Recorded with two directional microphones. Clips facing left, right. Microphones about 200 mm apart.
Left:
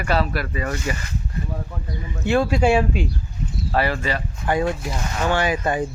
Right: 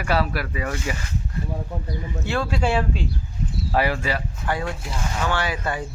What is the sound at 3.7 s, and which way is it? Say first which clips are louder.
Speech: left 1 dB; 10° right (ahead or behind).